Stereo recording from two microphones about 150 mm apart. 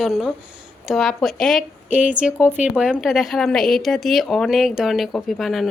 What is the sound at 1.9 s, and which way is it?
A woman's voice, 10° right (ahead or behind).